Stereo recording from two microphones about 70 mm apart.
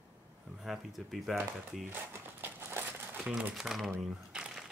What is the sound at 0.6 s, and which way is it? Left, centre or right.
Speech, centre.